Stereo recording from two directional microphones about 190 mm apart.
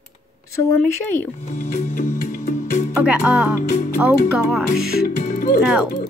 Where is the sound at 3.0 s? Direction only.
5° right (ahead or behind).